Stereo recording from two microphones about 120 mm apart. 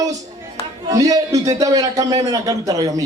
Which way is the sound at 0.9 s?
30° right (ahead or behind).